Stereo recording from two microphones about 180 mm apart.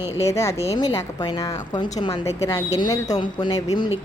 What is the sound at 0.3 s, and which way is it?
A woman's voice, 15° left (ahead or behind).